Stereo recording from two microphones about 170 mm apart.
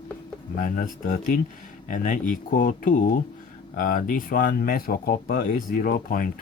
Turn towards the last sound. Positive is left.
turn(degrees=55)  # may be behind; listen again after turning